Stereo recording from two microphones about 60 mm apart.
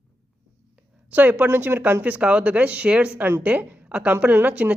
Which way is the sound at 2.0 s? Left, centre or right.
Right.